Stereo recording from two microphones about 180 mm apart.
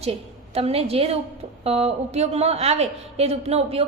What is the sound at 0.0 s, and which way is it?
A woman's voice, 35° right (ahead or behind).